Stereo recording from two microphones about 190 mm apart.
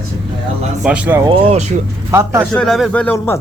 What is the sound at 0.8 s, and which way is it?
Speech, 5° right (ahead or behind).